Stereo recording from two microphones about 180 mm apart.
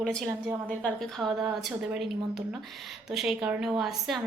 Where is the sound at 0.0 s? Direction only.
5° left (ahead or behind).